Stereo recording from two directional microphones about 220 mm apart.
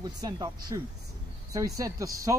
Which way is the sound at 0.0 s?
15° right (ahead or behind).